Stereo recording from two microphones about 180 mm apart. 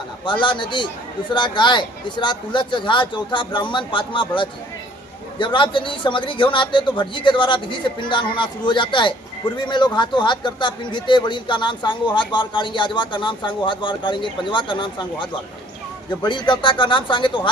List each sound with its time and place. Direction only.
0.3 s a man's voice: 25° left (ahead or behind)
5.4 s a man's voice: 25° left (ahead or behind)